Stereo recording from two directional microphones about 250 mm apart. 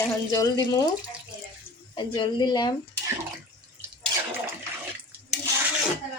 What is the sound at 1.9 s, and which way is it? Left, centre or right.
Speech, centre.